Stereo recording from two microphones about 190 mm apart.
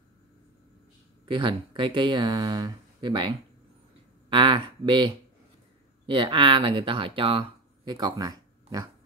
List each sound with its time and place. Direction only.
1.2 s speech: 25° right (ahead or behind)